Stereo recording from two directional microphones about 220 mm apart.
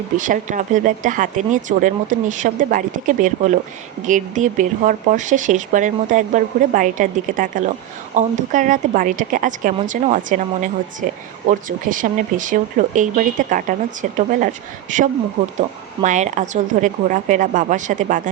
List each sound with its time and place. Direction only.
0.2 s speech: 35° right (ahead or behind)